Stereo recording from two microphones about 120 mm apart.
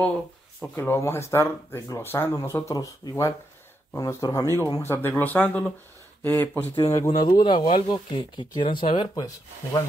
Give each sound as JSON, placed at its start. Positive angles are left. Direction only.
{"t": 0.6, "sound": "speech", "side_deg": 15}